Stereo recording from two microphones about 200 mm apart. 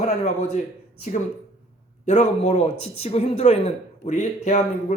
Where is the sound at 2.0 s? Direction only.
35° left (ahead or behind).